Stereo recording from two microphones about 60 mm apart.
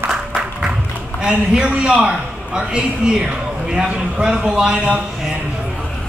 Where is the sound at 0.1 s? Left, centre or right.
Centre.